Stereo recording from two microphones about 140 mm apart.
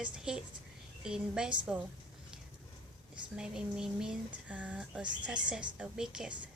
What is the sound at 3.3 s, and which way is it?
A woman's voice, 5° right (ahead or behind).